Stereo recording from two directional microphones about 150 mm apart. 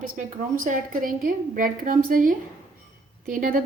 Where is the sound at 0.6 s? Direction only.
70° right (ahead or behind).